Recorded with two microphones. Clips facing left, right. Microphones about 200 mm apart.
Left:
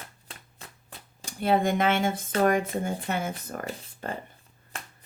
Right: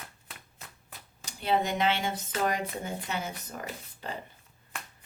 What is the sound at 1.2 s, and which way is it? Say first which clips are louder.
Dishes: left 4 dB; 50° left (ahead or behind).